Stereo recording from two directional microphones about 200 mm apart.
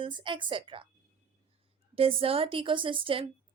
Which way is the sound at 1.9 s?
30° right (ahead or behind).